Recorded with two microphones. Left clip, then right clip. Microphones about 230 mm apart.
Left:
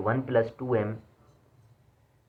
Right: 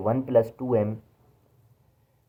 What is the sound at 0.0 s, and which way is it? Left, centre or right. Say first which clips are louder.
Speech: right 4 dB; centre.